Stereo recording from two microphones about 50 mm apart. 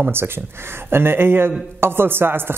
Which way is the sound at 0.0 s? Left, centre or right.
Right.